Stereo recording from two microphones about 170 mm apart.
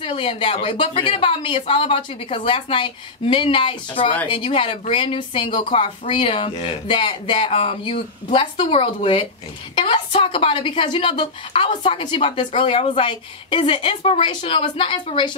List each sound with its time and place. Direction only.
0.0 s a woman's voice: 30° left (ahead or behind)